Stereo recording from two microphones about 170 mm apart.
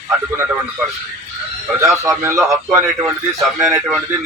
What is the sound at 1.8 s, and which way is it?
A man's voice, 15° right (ahead or behind).